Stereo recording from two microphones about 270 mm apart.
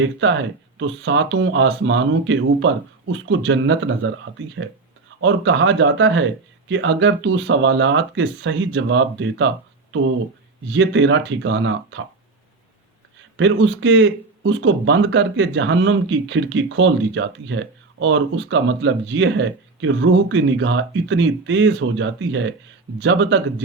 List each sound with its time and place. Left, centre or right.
0.0 s speech: right
10.7 s speech: right
13.3 s speech: right